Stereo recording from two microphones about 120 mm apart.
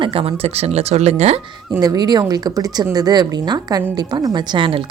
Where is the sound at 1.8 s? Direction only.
35° right (ahead or behind).